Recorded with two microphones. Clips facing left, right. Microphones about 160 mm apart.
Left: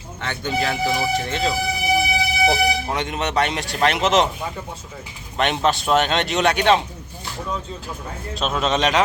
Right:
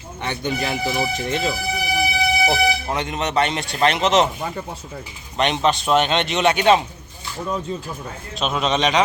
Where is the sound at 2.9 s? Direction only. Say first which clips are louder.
Right 1 dB; centre (ahead or behind).